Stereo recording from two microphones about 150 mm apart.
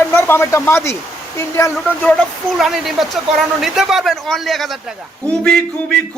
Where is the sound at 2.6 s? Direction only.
Centre (ahead or behind).